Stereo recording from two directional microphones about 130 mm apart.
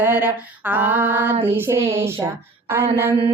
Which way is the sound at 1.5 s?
20° right (ahead or behind).